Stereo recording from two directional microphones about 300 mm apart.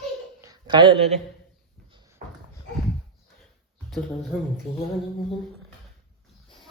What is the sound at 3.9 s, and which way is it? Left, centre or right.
Speech, centre.